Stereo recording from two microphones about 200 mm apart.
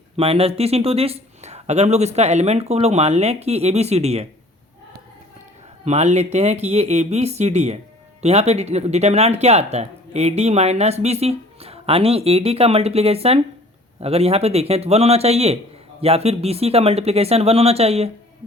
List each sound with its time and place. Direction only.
0.2 s speech: 30° right (ahead or behind)
5.8 s speech: 35° right (ahead or behind)